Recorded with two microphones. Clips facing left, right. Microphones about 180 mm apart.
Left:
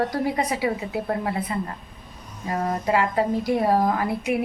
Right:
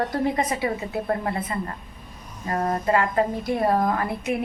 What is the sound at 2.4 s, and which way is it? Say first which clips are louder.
A woman's voice: right 1 dB; 5° left (ahead or behind).